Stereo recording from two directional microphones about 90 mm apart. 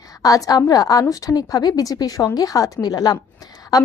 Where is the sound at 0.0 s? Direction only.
40° left (ahead or behind).